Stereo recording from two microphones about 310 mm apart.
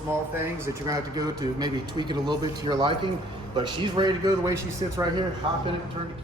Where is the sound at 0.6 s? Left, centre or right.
Centre.